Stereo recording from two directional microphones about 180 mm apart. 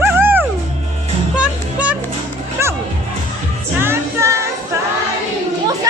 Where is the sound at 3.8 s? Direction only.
15° right (ahead or behind).